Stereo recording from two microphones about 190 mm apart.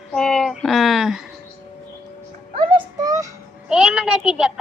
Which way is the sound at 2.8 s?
20° right (ahead or behind).